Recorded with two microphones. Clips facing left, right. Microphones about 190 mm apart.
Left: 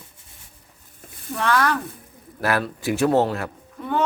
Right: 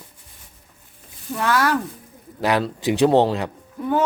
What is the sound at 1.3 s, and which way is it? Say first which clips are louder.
Speech: right 1 dB; 5° right (ahead or behind).